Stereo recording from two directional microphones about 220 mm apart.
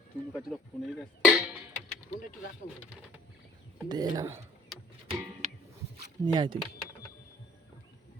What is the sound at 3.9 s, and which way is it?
Speech, 20° right (ahead or behind).